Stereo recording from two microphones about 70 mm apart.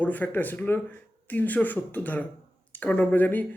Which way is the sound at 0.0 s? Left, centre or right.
Left.